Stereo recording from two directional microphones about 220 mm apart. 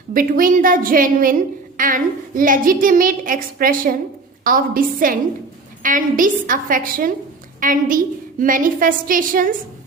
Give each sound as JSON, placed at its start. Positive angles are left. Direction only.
{"t": 0.1, "sound": "a woman's voice", "side_deg": -40}